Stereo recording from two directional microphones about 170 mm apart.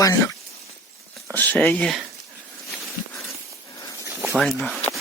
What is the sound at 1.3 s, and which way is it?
Speech, 10° left (ahead or behind).